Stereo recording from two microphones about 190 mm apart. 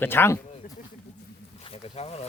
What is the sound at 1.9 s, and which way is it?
Speech, 30° left (ahead or behind).